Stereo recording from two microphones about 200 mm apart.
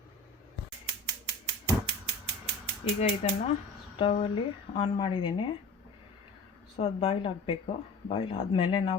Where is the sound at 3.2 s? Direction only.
30° left (ahead or behind).